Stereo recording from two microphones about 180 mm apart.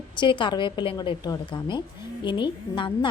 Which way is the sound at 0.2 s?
25° left (ahead or behind).